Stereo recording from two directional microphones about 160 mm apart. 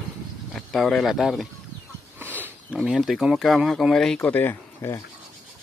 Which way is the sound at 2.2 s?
10° right (ahead or behind).